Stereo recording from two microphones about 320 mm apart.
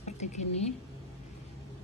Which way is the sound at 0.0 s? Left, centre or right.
Left.